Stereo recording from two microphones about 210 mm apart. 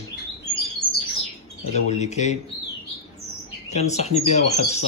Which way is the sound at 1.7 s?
35° left (ahead or behind).